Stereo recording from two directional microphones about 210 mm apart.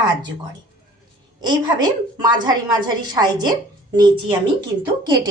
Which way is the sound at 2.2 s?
20° right (ahead or behind).